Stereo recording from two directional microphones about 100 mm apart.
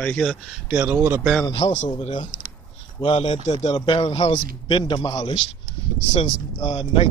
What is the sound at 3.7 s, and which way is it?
Speech, 55° left (ahead or behind).